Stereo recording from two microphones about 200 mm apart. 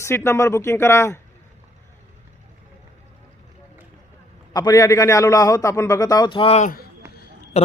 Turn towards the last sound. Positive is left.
turn(degrees=30)  # may be behind; listen again after turning